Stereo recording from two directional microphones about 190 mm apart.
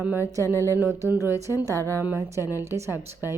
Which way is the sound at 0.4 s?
15° left (ahead or behind).